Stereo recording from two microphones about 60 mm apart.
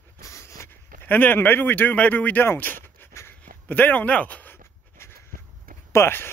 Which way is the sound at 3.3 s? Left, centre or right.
Left.